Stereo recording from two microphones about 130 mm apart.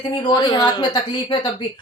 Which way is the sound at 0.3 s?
35° left (ahead or behind).